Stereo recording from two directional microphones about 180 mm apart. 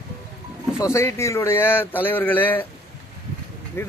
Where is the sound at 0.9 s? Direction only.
15° left (ahead or behind).